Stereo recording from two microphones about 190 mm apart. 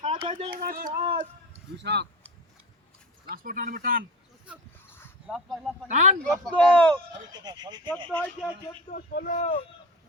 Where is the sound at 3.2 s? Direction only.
45° right (ahead or behind).